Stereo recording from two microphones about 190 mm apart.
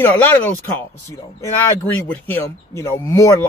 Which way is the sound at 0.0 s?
10° left (ahead or behind).